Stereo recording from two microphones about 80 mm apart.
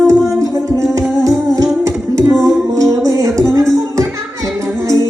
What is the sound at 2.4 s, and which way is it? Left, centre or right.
Music, right.